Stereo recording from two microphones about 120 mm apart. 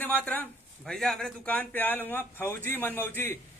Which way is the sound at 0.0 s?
15° left (ahead or behind).